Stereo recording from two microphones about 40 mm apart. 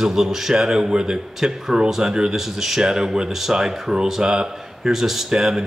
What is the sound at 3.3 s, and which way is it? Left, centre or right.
Speech, centre.